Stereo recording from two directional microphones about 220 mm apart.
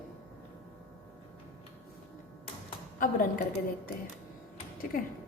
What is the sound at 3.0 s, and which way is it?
Speech, 40° left (ahead or behind).